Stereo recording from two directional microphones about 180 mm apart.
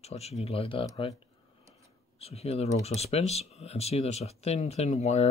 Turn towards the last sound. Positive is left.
turn(degrees=35)  # may be behind; listen again after turning